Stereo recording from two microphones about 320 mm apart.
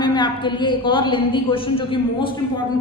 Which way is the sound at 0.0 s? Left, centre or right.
Centre.